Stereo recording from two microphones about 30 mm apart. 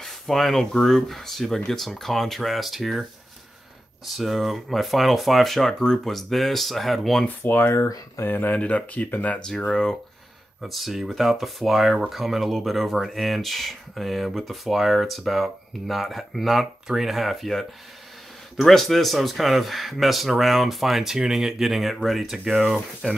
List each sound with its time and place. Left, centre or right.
0.0 s a sound: centre
0.8 s speech: centre
5.7 s speech: centre
6.1 s speech: centre
8.3 s speech: left
8.5 s speech: left
9.0 s speech: left
9.7 s speech: centre
10.6 s speech: centre
16.8 s speech: centre
17.1 s speech: centre
18.6 s speech: centre
23.0 s speech: left